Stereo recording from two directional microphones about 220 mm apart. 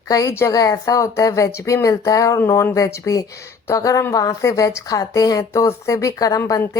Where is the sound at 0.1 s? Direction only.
15° left (ahead or behind).